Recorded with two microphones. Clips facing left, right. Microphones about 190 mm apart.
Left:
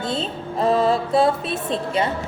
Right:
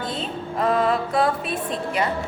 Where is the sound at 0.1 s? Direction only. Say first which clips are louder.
Left 3 dB; 30° left (ahead or behind).